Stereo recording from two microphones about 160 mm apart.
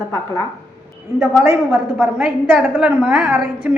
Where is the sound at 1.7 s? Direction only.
5° right (ahead or behind).